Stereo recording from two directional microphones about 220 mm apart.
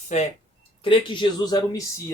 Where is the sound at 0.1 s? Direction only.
30° left (ahead or behind).